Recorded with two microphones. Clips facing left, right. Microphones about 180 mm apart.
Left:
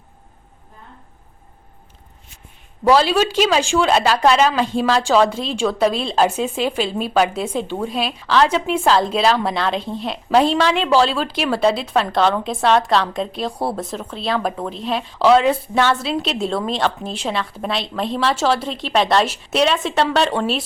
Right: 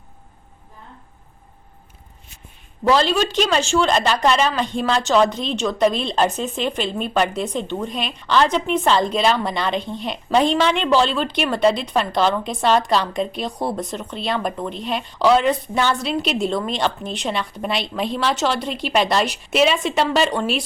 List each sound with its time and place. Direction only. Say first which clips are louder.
2.9 s a woman's voice: left 3 dB; 10° left (ahead or behind)